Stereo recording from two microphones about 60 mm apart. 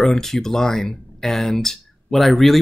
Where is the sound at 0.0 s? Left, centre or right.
Centre.